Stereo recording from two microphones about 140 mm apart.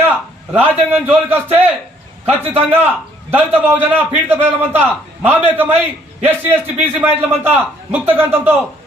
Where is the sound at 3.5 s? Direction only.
15° right (ahead or behind).